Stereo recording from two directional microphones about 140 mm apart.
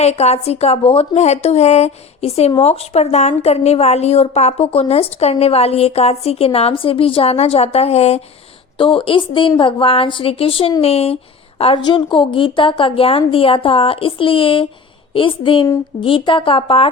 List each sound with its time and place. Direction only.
0.0 s a woman's voice: 50° left (ahead or behind)
8.8 s a woman's voice: 40° left (ahead or behind)
11.9 s a woman's voice: 35° left (ahead or behind)